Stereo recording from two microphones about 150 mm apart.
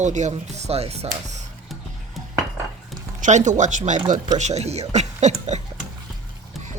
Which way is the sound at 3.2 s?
55° right (ahead or behind).